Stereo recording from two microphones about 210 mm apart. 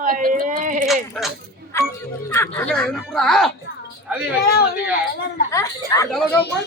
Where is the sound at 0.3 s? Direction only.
40° right (ahead or behind).